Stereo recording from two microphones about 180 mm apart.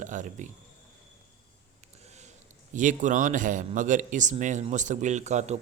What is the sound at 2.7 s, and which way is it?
A man's voice, 45° right (ahead or behind).